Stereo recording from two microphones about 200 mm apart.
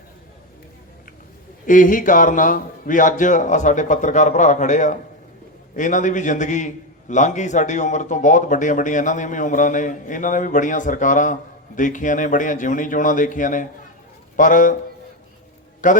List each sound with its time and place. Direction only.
1.6 s speech: 40° left (ahead or behind)
15.8 s speech: 40° left (ahead or behind)